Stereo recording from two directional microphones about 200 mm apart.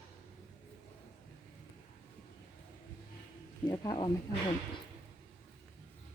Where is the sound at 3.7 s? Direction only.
20° left (ahead or behind).